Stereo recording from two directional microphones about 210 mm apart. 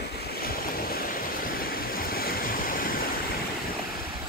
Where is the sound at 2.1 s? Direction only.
45° left (ahead or behind).